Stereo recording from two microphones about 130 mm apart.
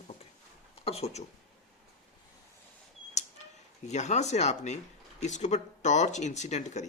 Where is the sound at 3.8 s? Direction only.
60° left (ahead or behind).